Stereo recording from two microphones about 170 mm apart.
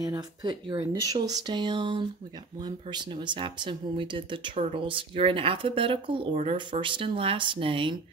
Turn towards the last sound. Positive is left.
turn(degrees=-30)  # may be behind; listen again after turning